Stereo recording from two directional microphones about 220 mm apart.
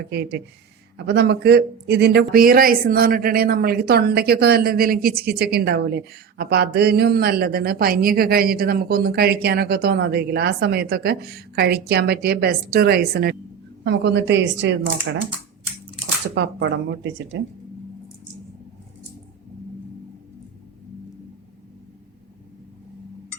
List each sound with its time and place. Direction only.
0.1 s speech: 50° right (ahead or behind)
16.3 s speech: 55° right (ahead or behind)